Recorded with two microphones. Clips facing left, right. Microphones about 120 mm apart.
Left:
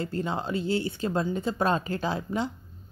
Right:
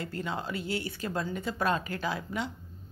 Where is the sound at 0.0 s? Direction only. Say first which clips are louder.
Left 5 dB; 30° left (ahead or behind).